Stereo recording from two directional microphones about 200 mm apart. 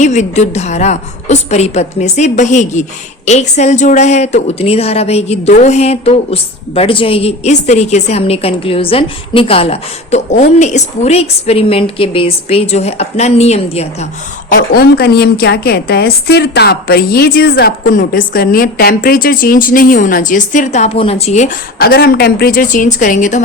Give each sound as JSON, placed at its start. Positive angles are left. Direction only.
{"t": 0.0, "sound": "speech", "side_deg": 35}
{"t": 14.5, "sound": "a woman's voice", "side_deg": 50}